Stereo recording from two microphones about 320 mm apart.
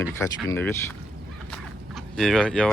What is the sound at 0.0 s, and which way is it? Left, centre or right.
Speech, centre.